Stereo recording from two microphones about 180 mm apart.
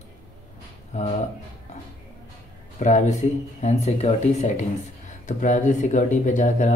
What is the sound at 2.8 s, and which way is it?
Speech, 40° left (ahead or behind).